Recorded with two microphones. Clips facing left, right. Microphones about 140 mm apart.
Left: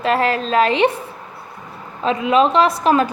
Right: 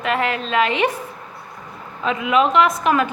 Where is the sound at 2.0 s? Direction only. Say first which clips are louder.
Left 3 dB; 35° left (ahead or behind).